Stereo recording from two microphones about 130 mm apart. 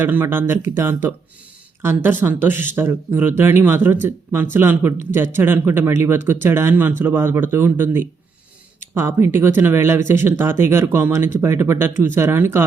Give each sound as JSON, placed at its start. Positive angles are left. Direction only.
{"t": 0.0, "sound": "speech", "side_deg": -15}
{"t": 1.8, "sound": "speech", "side_deg": -15}